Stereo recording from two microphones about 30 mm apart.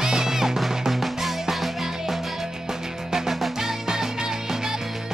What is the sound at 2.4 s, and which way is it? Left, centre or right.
Music, centre.